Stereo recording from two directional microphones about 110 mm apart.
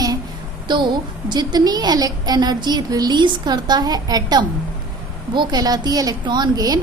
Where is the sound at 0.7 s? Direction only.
45° right (ahead or behind).